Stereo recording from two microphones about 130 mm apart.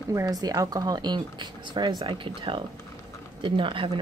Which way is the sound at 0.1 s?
25° right (ahead or behind).